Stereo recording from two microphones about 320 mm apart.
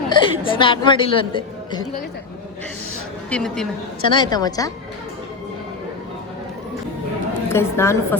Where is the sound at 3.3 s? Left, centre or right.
Centre.